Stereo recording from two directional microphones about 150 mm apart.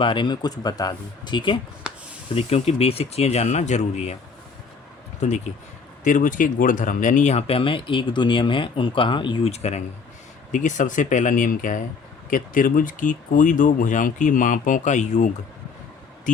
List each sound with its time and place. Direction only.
0.0 s speech: 30° left (ahead or behind)
2.3 s speech: 45° left (ahead or behind)
5.2 s speech: 50° left (ahead or behind)